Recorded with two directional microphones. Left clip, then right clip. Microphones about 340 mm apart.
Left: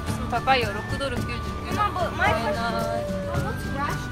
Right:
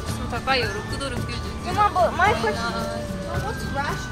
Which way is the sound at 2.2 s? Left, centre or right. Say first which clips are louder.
Right 1 dB; right.